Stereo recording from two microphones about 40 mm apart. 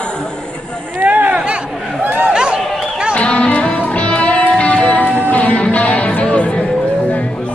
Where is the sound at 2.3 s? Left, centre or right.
Right.